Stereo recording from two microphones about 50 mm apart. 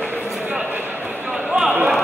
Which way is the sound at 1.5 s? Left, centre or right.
Centre.